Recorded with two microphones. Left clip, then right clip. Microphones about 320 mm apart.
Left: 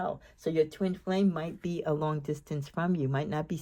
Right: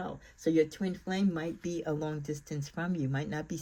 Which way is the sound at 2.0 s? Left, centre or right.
Centre.